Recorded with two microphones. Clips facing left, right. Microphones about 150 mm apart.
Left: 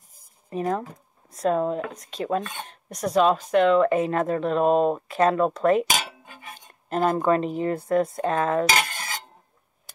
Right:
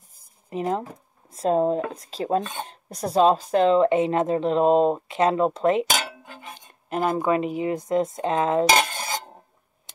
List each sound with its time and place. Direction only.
0.5 s cutlery: 20° right (ahead or behind)
6.5 s speech: 10° right (ahead or behind)
9.9 s tick: 20° right (ahead or behind)